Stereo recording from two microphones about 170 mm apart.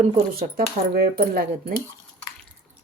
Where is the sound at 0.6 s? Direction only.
65° right (ahead or behind).